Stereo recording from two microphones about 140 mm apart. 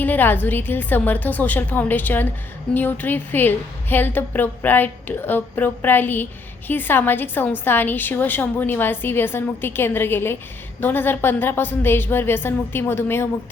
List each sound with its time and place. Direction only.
0.0 s a woman's voice: 15° left (ahead or behind)